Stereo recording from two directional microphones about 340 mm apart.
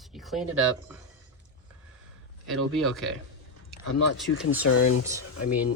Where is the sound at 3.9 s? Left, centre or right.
Left.